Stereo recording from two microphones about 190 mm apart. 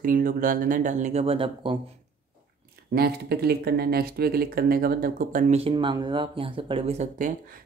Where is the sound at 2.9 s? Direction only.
55° right (ahead or behind).